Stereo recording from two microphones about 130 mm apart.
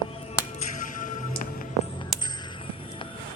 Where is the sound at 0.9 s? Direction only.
90° left.